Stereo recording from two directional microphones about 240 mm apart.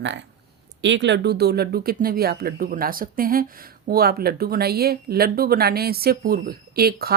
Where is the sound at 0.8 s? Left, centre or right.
Right.